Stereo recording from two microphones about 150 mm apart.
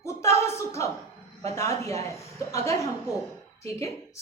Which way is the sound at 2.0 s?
20° left (ahead or behind).